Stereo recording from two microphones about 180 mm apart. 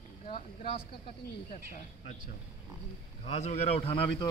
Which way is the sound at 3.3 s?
40° left (ahead or behind).